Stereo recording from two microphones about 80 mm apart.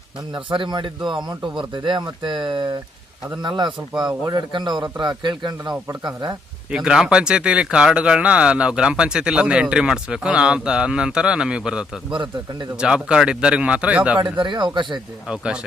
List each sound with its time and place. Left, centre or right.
0.3 s a man's voice: right
6.7 s speech: centre
14.2 s speech: right
15.3 s speech: centre